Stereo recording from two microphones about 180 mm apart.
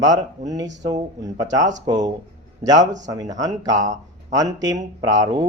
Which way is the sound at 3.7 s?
45° right (ahead or behind).